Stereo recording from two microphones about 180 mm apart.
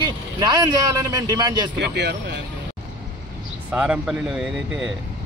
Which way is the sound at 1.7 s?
70° right (ahead or behind).